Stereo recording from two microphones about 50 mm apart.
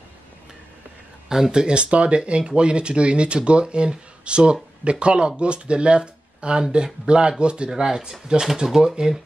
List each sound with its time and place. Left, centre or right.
1.3 s speech: centre